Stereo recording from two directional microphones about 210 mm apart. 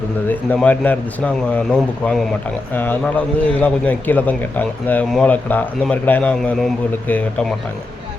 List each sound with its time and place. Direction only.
0.3 s a man's voice: 10° left (ahead or behind)